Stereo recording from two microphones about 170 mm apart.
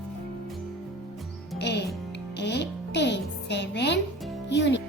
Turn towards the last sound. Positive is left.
turn(degrees=90)